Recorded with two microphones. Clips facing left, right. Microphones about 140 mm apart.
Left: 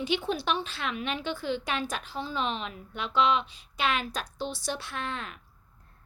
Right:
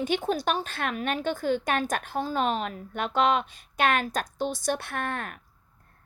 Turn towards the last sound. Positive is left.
turn(degrees=-55)  # may be behind; listen again after turning